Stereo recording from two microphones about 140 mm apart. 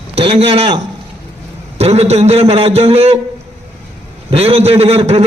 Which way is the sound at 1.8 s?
50° right (ahead or behind).